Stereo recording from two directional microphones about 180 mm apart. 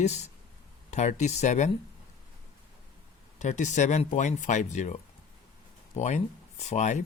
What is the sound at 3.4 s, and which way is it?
Speech, 40° left (ahead or behind).